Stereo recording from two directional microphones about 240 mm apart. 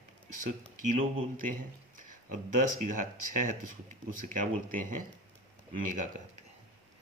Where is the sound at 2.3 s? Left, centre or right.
Right.